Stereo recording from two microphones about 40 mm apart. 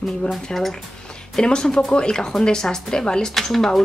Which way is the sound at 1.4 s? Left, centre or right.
Centre.